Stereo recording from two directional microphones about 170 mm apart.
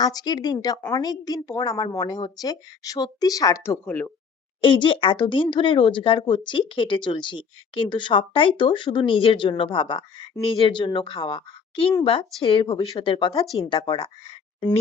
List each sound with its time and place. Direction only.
0.0 s speech: 25° left (ahead or behind)
4.6 s speech: 30° left (ahead or behind)